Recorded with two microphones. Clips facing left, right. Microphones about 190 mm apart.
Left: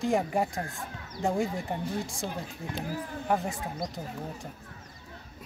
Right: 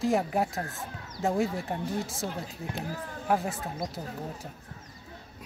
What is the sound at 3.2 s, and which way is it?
Speech, centre (ahead or behind).